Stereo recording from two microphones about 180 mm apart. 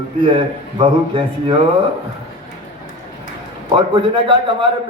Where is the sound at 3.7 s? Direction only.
30° right (ahead or behind).